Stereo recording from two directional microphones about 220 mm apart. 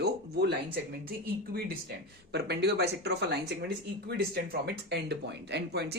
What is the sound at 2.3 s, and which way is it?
Speech, 50° right (ahead or behind).